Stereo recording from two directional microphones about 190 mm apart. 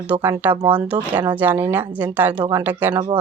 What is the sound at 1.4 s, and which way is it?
Speech, 10° right (ahead or behind).